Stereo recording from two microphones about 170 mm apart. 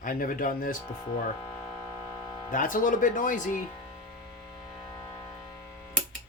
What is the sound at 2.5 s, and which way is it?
Speech, 55° left (ahead or behind).